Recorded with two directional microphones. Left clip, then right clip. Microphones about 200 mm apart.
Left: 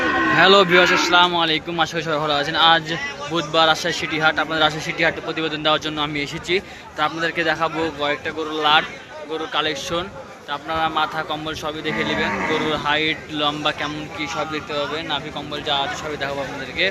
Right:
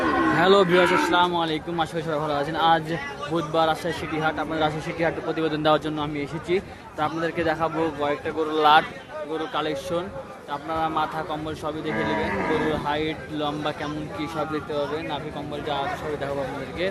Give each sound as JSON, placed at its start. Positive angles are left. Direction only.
{"t": 0.3, "sound": "a man's voice", "side_deg": -5}
{"t": 5.3, "sound": "speech", "side_deg": -25}
{"t": 6.0, "sound": "a man's voice", "side_deg": 0}
{"t": 14.2, "sound": "a man's voice", "side_deg": -20}